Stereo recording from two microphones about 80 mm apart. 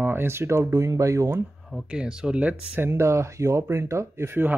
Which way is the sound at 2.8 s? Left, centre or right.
Right.